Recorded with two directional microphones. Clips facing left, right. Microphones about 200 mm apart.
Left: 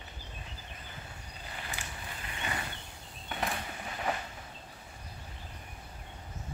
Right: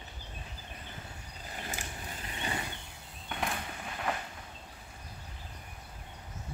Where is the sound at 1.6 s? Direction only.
40° right (ahead or behind).